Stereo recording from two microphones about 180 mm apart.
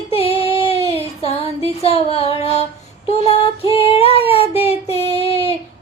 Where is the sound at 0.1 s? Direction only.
35° left (ahead or behind).